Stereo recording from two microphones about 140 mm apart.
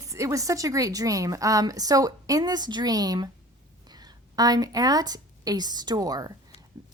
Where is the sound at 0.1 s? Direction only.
20° right (ahead or behind).